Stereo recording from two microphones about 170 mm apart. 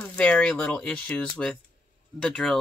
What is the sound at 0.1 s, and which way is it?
Speech, 5° left (ahead or behind).